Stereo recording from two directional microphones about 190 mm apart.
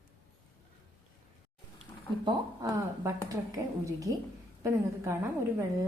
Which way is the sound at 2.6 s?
15° right (ahead or behind).